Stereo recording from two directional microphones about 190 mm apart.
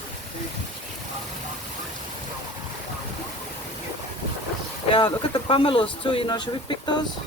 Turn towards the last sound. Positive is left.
turn(degrees=25)  # may be behind; listen again after turning